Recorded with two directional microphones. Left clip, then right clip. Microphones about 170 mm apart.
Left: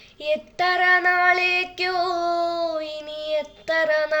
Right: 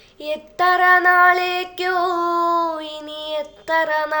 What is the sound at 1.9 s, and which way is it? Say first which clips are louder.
Music: right 5 dB; 55° right (ahead or behind).